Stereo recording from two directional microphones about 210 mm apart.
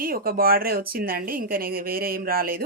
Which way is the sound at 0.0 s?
45° right (ahead or behind).